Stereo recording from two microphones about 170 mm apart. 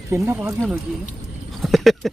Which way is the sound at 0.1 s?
15° right (ahead or behind).